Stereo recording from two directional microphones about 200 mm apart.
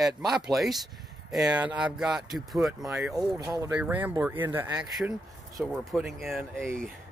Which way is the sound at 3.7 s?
5° right (ahead or behind).